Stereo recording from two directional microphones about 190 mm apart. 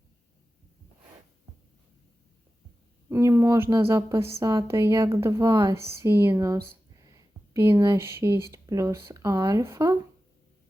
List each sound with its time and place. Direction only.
3.1 s speech: 15° right (ahead or behind)